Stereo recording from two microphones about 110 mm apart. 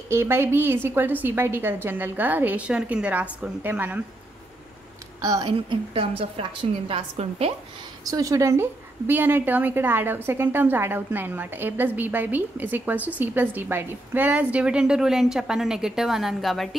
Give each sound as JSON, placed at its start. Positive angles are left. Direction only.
{"t": 0.1, "sound": "a woman's voice", "side_deg": -25}
{"t": 5.4, "sound": "a woman's voice", "side_deg": -55}
{"t": 8.0, "sound": "a woman's voice", "side_deg": -30}